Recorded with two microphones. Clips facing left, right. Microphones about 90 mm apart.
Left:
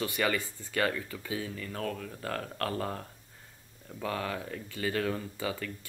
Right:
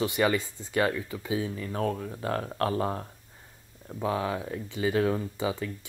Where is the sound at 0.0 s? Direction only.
20° right (ahead or behind).